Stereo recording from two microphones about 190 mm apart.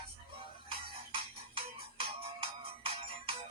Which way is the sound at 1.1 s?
30° right (ahead or behind).